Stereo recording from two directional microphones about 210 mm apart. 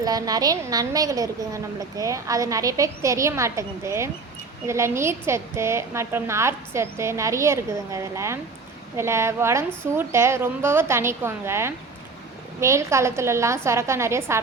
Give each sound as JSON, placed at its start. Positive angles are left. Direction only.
{"t": 0.0, "sound": "a woman's voice", "side_deg": -15}